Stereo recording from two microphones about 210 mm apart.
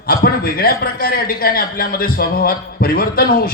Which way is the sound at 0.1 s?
45° left (ahead or behind).